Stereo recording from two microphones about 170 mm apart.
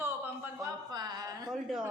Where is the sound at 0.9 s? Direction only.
25° right (ahead or behind).